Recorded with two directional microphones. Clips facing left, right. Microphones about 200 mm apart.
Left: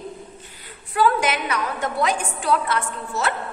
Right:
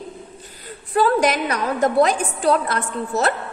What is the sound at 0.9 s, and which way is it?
A woman's voice, 40° right (ahead or behind).